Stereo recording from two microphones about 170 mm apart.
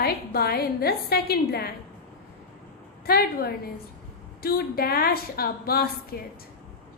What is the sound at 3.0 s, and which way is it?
A woman's voice, 65° left (ahead or behind).